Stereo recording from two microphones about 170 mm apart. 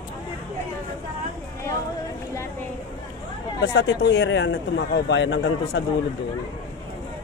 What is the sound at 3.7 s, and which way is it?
A man's voice, 80° left.